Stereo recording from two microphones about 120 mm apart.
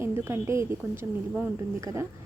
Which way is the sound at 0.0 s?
20° right (ahead or behind).